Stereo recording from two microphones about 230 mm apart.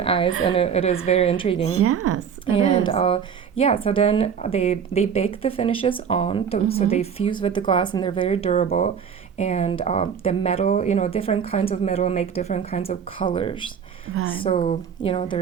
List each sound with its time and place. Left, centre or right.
0.0 s a woman's voice: left
1.7 s speech: right
2.6 s speech: left